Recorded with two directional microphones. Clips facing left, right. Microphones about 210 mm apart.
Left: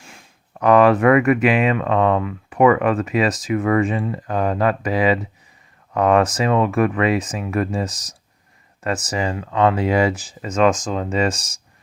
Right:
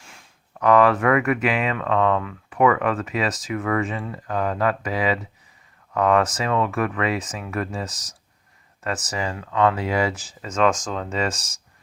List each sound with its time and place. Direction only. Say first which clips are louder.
0.5 s speech: left 3 dB; 20° left (ahead or behind)